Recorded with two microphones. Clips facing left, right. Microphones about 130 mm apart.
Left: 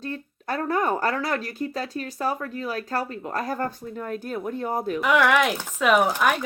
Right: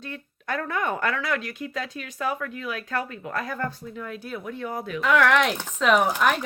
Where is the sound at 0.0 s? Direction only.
35° left (ahead or behind).